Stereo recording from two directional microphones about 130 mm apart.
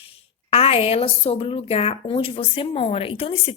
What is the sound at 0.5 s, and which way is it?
A woman's voice, 50° left (ahead or behind).